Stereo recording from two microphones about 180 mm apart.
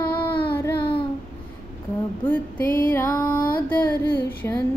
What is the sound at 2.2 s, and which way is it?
Music, 10° left (ahead or behind).